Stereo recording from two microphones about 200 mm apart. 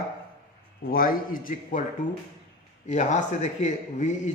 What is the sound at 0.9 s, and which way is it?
Speech, 45° left (ahead or behind).